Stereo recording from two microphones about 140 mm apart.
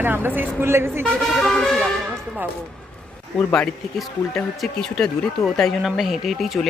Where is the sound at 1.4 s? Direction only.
5° left (ahead or behind).